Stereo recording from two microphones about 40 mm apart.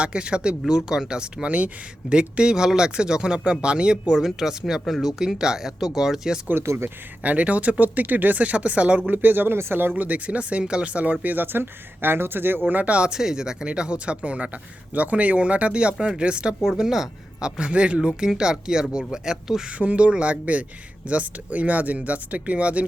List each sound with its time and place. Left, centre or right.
0.0 s speech: right
1.5 s speech: right
4.2 s speech: centre
6.6 s speech: right
7.2 s speech: right
9.9 s speech: right
10.8 s speech: right
11.5 s speech: right
12.6 s speech: right
13.1 s speech: centre
16.6 s speech: centre
17.6 s speech: right; by 19.6 s centre
19.8 s speech: right